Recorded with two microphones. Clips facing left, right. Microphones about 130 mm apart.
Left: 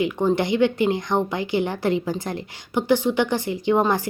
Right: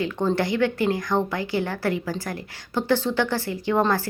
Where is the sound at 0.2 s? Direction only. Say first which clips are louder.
Left 2 dB; 15° left (ahead or behind).